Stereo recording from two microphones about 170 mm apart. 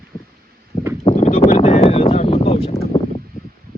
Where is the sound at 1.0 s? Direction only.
45° left (ahead or behind).